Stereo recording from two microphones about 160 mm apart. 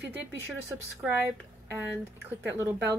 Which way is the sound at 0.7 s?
10° right (ahead or behind).